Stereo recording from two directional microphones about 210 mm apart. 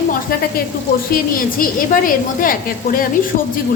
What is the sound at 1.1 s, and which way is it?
A woman's voice, 40° left (ahead or behind).